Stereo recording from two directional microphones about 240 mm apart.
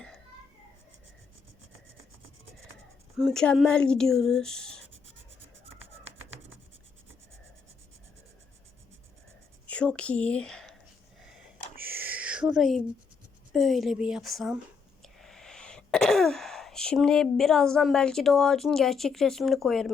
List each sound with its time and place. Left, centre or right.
3.2 s speech: centre
5.8 s rub: right
9.6 s speech: centre
11.8 s a sound: centre
13.5 s speech: centre
15.0 s throat clearing: centre